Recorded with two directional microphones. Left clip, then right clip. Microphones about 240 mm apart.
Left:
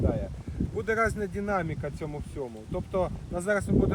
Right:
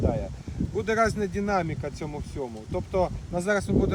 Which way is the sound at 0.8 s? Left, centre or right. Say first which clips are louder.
Right 3 dB; centre.